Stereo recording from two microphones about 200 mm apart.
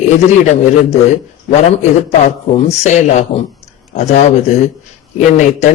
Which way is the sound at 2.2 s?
35° left (ahead or behind).